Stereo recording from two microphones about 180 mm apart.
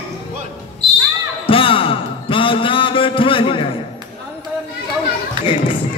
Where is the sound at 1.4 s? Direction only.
30° left (ahead or behind).